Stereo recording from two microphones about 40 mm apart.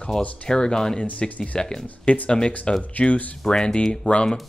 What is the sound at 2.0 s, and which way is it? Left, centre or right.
Speech, left.